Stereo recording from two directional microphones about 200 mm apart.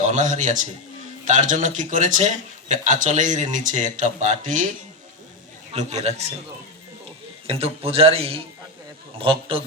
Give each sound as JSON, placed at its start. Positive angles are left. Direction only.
{"t": 0.0, "sound": "a man's voice", "side_deg": -35}
{"t": 5.7, "sound": "a man's voice", "side_deg": -35}
{"t": 7.4, "sound": "a man's voice", "side_deg": -30}